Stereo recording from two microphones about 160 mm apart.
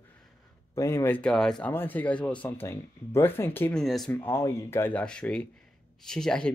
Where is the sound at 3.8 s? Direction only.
Centre (ahead or behind).